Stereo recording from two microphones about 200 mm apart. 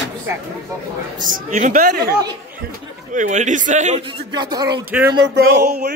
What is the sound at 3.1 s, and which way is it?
Speech, 40° right (ahead or behind).